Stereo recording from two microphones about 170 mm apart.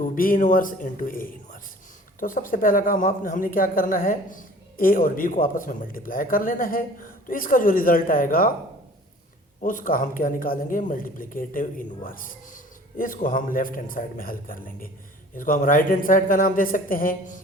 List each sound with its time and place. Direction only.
0.0 s a man's voice: 55° left (ahead or behind)
9.6 s a man's voice: 55° left (ahead or behind)